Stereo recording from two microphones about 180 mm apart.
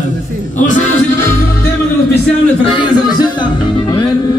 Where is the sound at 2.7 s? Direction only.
25° left (ahead or behind).